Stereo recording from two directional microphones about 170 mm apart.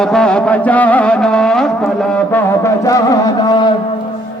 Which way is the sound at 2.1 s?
10° left (ahead or behind).